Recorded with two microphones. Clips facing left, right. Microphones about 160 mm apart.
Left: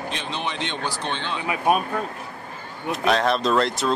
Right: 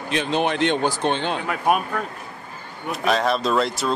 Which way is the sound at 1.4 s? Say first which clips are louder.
Left 2 dB; 15° left (ahead or behind).